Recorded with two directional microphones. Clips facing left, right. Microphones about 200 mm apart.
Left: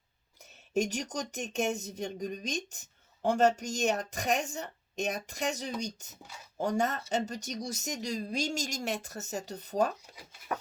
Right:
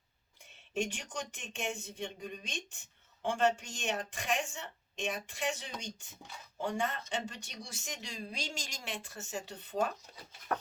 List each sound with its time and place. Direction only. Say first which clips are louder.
0.7 s speech: left 6 dB; 40° left (ahead or behind)